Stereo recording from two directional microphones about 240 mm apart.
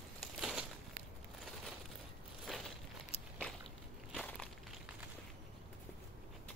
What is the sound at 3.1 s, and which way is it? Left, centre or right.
Walk, left.